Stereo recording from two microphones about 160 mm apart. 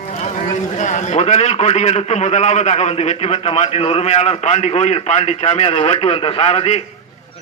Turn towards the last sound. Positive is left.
turn(degrees=40)  # may be behind; listen again after turning